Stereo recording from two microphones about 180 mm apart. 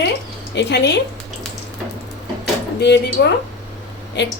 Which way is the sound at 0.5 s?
70° left (ahead or behind).